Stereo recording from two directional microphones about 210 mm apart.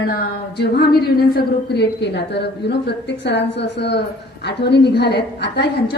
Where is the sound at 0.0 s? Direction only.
50° left (ahead or behind).